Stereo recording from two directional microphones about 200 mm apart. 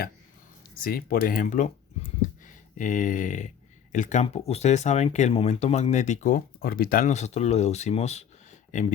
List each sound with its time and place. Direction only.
0.9 s speech: 45° left (ahead or behind)
2.7 s speech: 40° left (ahead or behind)